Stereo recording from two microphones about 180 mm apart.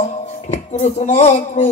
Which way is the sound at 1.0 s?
40° left (ahead or behind).